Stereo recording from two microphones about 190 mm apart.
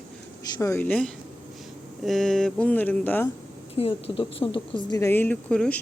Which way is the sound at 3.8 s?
30° left (ahead or behind).